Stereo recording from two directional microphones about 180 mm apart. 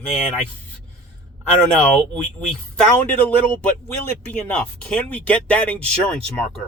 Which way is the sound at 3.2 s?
10° left (ahead or behind).